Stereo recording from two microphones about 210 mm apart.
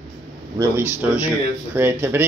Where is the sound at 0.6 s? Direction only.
15° right (ahead or behind).